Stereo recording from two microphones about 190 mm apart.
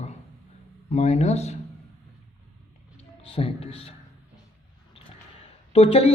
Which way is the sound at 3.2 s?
30° left (ahead or behind).